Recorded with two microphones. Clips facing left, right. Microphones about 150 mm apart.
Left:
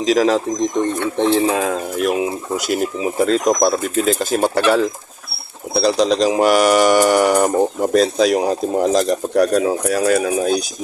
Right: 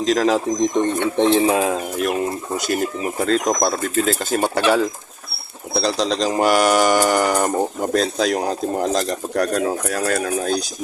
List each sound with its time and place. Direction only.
0.0 s speech: 5° left (ahead or behind)
0.3 s speech: 15° right (ahead or behind)
1.5 s speech: 5° right (ahead or behind); by 10.6 s 10° left (ahead or behind)